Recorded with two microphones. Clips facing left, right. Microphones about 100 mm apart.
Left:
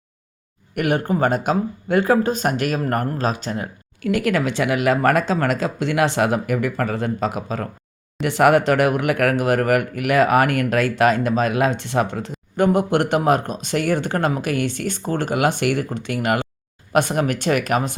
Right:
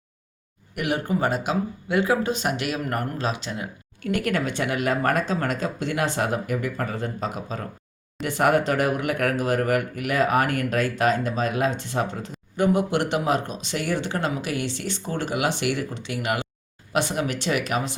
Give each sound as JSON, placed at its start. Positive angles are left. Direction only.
{"t": 0.8, "sound": "speech", "side_deg": 50}
{"t": 4.0, "sound": "speech", "side_deg": 90}